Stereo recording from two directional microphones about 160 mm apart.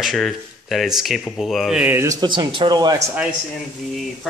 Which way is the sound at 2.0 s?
25° right (ahead or behind).